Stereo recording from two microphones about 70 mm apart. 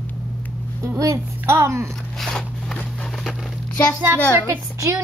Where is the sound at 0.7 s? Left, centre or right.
Right.